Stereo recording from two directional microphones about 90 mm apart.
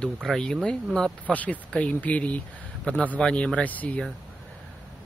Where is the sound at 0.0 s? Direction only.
5° left (ahead or behind).